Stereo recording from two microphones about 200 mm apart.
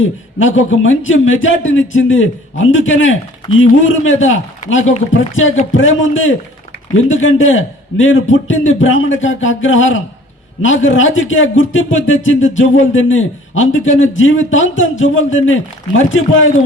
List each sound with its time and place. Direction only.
0.3 s a man's voice: 75° left (ahead or behind)
3.5 s speech: 30° left (ahead or behind)
3.8 s a man's voice: 75° left (ahead or behind)